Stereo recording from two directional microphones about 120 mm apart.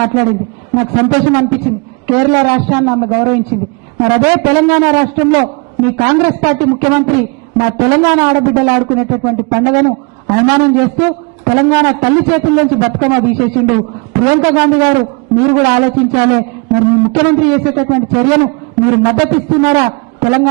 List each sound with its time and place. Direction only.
0.0 s a man's voice: 20° right (ahead or behind)